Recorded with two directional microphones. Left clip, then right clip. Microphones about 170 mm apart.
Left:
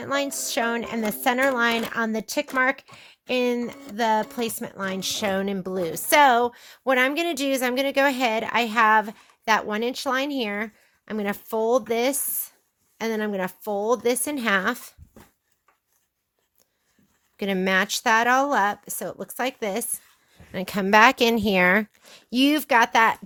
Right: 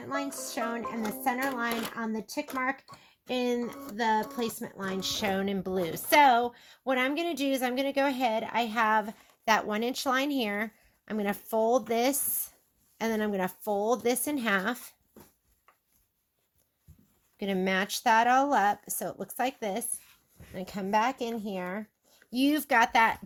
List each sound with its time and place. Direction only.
0.0 s a woman's voice: 55° left (ahead or behind); by 6.0 s 20° left (ahead or behind)
6.1 s speech: 35° left (ahead or behind)
17.3 s speech: 35° left (ahead or behind)
20.5 s speech: 45° left (ahead or behind); by 21.8 s 60° left (ahead or behind)
22.3 s speech: 40° left (ahead or behind)